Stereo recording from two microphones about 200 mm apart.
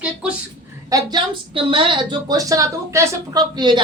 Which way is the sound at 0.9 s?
20° right (ahead or behind).